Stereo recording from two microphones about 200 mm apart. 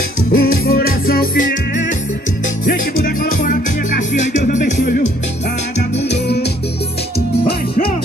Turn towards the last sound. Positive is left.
turn(degrees=55)  # may be behind; listen again after turning